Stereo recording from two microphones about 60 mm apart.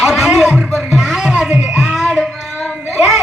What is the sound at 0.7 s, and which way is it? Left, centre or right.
Music, centre.